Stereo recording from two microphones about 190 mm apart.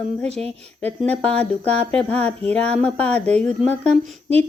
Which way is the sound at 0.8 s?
10° left (ahead or behind).